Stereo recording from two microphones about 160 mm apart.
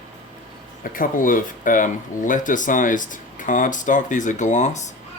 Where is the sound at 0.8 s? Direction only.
60° left (ahead or behind).